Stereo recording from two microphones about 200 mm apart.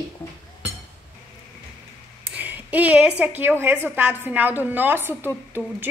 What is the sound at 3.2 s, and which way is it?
A woman's voice, 10° right (ahead or behind).